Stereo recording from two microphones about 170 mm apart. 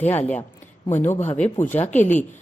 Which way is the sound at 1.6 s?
45° left (ahead or behind).